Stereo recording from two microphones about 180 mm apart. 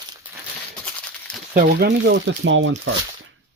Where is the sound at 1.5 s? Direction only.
65° right (ahead or behind); by 2.7 s 90° right.